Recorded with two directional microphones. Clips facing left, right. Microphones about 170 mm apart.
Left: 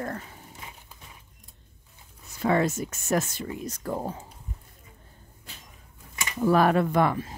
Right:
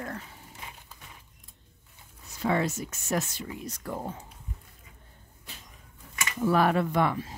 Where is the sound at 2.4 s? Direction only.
50° left (ahead or behind).